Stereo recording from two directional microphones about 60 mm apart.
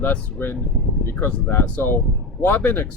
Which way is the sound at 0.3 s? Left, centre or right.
Left.